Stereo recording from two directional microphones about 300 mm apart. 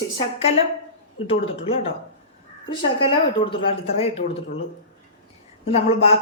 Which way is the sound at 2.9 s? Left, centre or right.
Centre.